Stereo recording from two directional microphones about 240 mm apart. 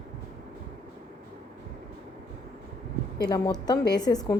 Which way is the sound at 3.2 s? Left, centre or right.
Centre.